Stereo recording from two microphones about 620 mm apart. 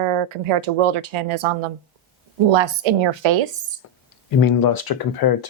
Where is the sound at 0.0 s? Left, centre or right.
Right.